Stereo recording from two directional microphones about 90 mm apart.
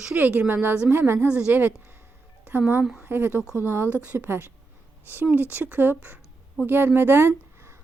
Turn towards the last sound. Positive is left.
turn(degrees=-30)  # may be behind; listen again after turning